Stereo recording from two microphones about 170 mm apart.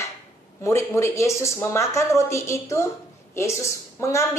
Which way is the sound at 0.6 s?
15° left (ahead or behind).